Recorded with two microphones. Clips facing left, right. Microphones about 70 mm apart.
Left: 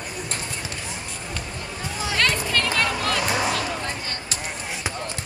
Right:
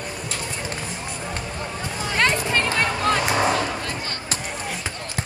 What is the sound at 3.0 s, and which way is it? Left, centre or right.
Music, right.